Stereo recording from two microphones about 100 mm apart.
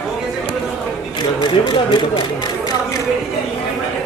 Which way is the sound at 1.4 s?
50° left (ahead or behind).